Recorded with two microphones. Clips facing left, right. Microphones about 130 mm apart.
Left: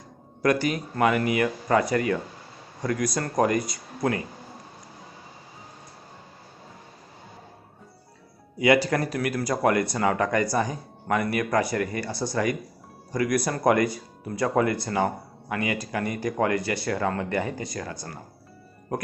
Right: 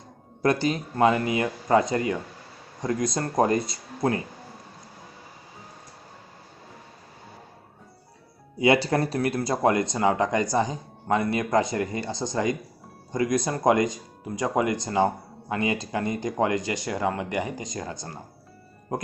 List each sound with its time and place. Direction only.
0.4 s speech: 25° right (ahead or behind)
8.5 s speech: 25° right (ahead or behind)